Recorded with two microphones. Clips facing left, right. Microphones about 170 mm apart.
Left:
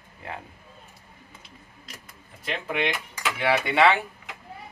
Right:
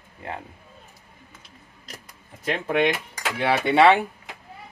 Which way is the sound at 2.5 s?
45° right (ahead or behind).